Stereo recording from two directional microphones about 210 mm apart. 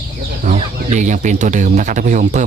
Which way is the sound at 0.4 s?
35° right (ahead or behind).